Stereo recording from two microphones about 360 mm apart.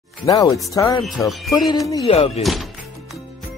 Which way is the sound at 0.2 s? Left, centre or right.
Centre.